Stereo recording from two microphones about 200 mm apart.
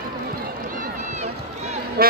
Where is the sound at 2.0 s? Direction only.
50° right (ahead or behind).